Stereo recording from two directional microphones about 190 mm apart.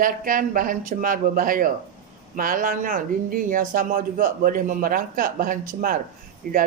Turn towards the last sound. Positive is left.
turn(degrees=-45)  # may be behind; listen again after turning